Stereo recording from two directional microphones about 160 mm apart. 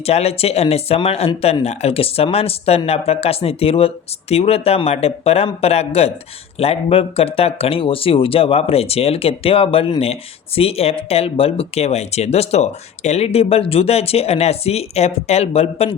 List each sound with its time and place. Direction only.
0.0 s speech: 40° left (ahead or behind)